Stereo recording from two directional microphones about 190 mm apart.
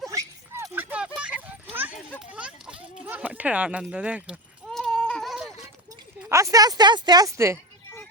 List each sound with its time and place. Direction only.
0.1 s dog: 20° right (ahead or behind)
1.2 s a sound: 5° right (ahead or behind)
6.2 s speech: 15° right (ahead or behind)